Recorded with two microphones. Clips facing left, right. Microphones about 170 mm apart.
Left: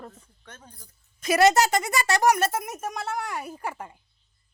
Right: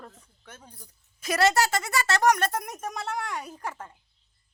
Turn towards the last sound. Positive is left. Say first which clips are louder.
# left 3 dB
turn(degrees=10)  # may be behind; listen again after turning